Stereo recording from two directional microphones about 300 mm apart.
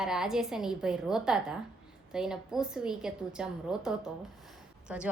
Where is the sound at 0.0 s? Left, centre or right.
Centre.